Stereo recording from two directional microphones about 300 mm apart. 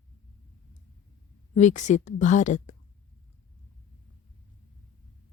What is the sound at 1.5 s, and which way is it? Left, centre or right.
A woman's voice, left.